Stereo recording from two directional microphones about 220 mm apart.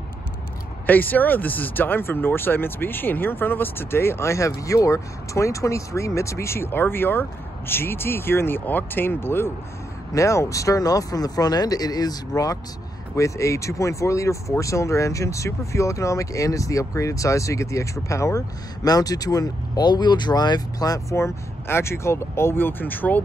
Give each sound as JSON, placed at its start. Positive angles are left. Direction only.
{"t": 0.8, "sound": "speech", "side_deg": 10}